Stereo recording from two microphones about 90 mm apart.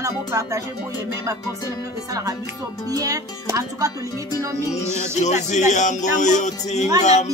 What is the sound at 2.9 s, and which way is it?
Speech, 40° right (ahead or behind).